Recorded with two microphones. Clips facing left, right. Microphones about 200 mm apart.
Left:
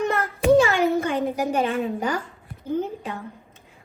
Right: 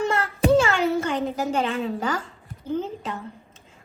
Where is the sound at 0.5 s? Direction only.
15° left (ahead or behind).